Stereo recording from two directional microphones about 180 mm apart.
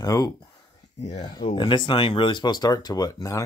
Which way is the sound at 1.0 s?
40° left (ahead or behind).